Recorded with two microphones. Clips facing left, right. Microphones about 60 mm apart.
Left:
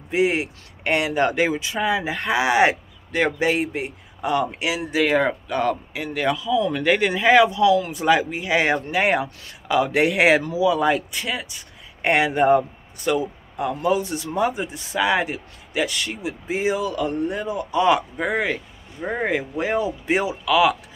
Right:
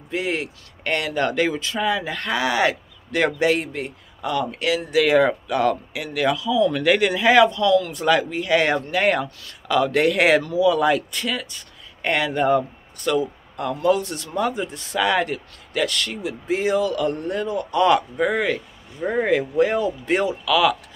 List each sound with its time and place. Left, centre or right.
0.1 s speech: centre
3.1 s a man's voice: centre; by 4.6 s left
4.6 s speech: centre
5.0 s speech: centre
7.5 s speech: centre
13.0 s speech: centre